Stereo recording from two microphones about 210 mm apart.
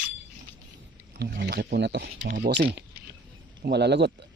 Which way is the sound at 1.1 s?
50° right (ahead or behind).